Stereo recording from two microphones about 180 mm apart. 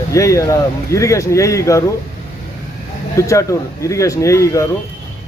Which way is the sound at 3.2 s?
15° left (ahead or behind).